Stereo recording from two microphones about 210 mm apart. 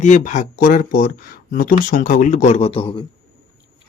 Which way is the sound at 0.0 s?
35° left (ahead or behind).